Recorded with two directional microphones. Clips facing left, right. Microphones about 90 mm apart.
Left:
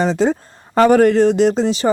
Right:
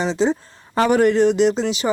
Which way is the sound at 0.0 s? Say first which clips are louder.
Left 3 dB; 50° left (ahead or behind).